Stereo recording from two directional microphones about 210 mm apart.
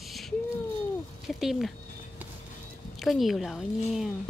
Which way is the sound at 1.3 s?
Centre (ahead or behind).